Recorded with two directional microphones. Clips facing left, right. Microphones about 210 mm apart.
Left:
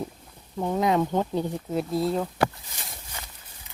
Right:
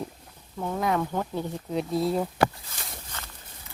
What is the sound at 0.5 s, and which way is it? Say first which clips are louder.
Speech: left 4 dB; 20° left (ahead or behind).